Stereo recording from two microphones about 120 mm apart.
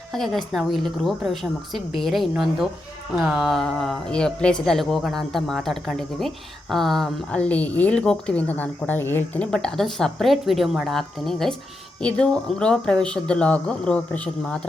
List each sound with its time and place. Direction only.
0.1 s speech: centre (ahead or behind)
3.2 s speech: 5° right (ahead or behind)